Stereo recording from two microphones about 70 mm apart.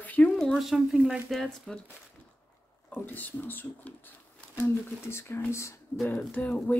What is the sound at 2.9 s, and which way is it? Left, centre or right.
Speech, left.